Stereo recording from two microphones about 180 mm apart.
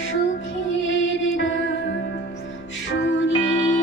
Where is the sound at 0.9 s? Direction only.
90° left.